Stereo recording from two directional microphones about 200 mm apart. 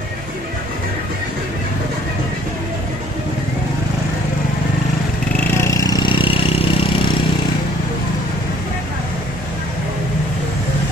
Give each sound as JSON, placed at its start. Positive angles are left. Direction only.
{"t": 5.6, "sound": "vehicle", "side_deg": 15}